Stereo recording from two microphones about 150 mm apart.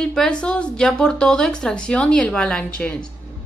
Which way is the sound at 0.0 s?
5° left (ahead or behind).